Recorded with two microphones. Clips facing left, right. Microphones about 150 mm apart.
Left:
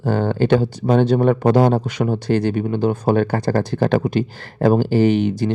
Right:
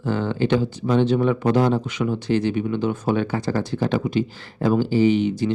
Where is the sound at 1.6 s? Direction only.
55° left (ahead or behind).